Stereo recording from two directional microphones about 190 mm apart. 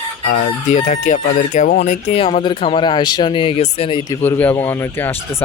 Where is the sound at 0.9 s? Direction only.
40° left (ahead or behind).